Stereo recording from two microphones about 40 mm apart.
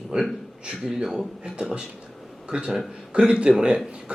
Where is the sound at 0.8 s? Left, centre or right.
Centre.